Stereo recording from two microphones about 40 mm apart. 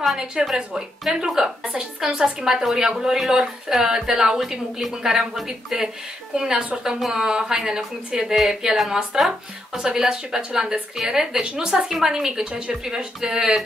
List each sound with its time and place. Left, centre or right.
0.4 s a woman's voice: centre